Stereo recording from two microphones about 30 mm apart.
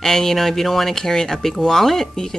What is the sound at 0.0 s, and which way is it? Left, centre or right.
Speech, centre.